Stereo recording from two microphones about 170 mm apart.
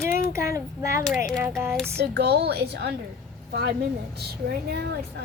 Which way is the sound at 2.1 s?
70° right (ahead or behind).